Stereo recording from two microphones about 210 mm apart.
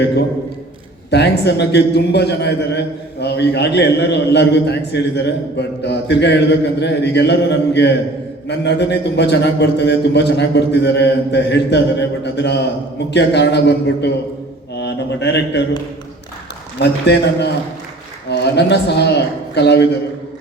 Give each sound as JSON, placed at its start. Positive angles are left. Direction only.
{"t": 1.1, "sound": "a man's voice", "side_deg": 55}
{"t": 16.8, "sound": "a man's voice", "side_deg": 55}